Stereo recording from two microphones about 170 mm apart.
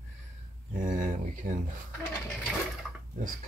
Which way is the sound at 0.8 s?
50° right (ahead or behind).